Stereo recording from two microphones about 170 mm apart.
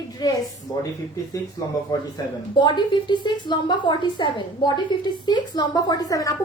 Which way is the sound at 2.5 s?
25° left (ahead or behind).